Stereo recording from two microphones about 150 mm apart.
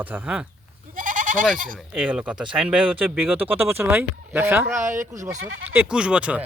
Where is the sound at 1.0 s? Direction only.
60° right (ahead or behind).